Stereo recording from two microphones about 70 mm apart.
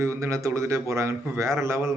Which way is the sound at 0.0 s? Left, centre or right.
Right.